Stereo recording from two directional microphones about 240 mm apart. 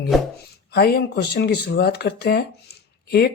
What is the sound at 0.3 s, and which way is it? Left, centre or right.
Speech, left.